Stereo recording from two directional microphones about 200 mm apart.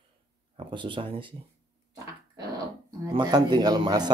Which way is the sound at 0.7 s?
25° right (ahead or behind).